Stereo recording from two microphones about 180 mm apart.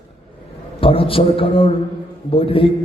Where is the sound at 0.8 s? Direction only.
30° left (ahead or behind).